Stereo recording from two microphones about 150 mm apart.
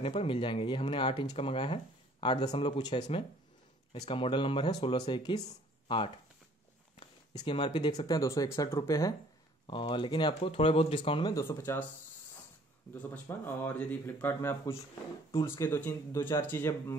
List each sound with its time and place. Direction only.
0.0 s speech: 35° left (ahead or behind)
7.3 s speech: 35° left (ahead or behind)
8.0 s speech: 25° left (ahead or behind)
9.7 s speech: 35° left (ahead or behind)
11.3 s speech: 15° left (ahead or behind)
12.9 s speech: 10° left (ahead or behind)